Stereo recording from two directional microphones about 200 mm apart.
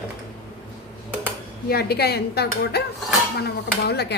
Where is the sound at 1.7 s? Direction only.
50° left (ahead or behind).